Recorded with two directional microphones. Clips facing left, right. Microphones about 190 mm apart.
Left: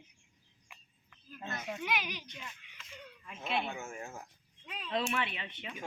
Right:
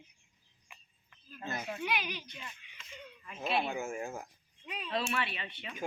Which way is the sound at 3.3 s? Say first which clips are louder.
Right 3 dB; 30° right (ahead or behind).